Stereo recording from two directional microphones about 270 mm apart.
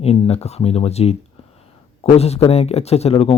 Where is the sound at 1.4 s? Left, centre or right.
Left.